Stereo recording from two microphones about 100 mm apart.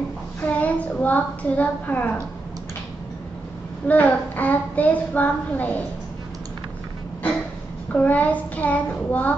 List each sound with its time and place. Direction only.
0.4 s a woman's voice: 15° left (ahead or behind)
3.8 s a child's voice: 15° left (ahead or behind)
7.9 s a child's voice: 15° left (ahead or behind)